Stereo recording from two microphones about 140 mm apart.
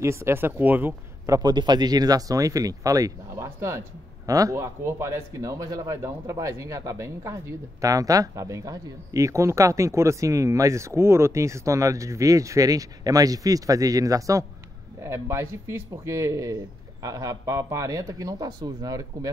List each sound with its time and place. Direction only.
0.0 s speech: 20° right (ahead or behind)